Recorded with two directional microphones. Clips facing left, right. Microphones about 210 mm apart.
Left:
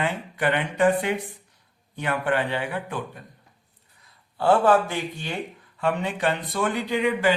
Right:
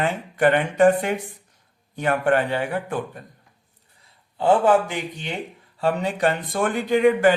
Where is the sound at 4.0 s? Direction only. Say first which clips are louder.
Right 2 dB; 20° right (ahead or behind).